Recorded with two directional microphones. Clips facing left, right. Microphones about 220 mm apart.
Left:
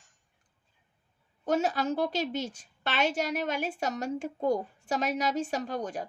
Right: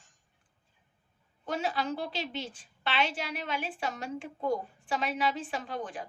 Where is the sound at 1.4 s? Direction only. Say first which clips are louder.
Left 5 dB; 45° left (ahead or behind).